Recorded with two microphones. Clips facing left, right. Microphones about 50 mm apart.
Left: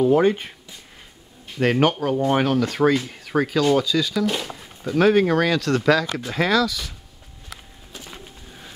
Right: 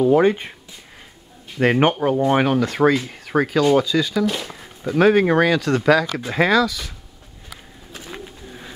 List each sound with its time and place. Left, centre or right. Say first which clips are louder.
0.2 s speech: right 2 dB; centre
1.6 s speech: right 2 dB; centre
7.9 s bird: right 4 dB; right